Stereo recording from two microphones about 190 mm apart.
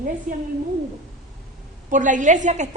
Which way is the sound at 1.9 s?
40° right (ahead or behind).